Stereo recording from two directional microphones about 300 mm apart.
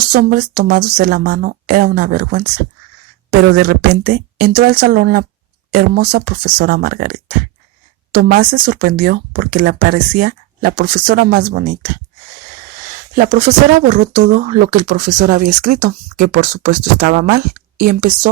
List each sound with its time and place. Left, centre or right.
0.1 s speech: right
13.1 s speech: right